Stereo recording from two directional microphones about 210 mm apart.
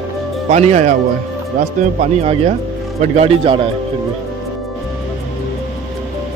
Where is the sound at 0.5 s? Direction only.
30° right (ahead or behind).